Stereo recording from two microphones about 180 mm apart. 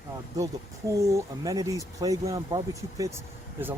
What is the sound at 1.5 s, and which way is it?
Speech, 20° right (ahead or behind).